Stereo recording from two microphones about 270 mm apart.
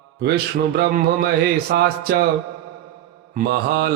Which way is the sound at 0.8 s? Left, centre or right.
Right.